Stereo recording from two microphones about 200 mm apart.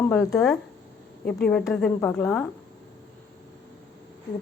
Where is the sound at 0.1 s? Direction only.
5° left (ahead or behind).